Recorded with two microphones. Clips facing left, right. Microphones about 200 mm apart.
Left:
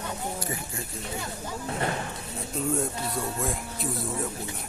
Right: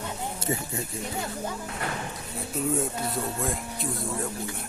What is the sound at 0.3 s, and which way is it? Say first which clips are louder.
Speech: right 4 dB; 25° right (ahead or behind).